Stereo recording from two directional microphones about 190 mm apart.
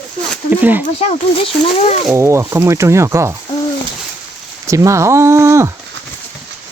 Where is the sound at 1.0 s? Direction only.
30° left (ahead or behind).